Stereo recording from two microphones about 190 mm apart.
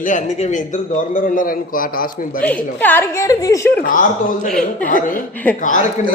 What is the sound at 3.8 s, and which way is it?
A man's voice, 45° left (ahead or behind).